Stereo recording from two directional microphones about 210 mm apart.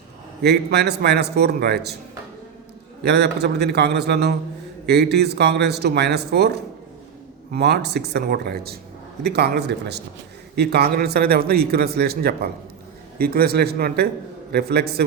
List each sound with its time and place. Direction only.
0.4 s a man's voice: 50° right (ahead or behind)
3.0 s a man's voice: 50° right (ahead or behind)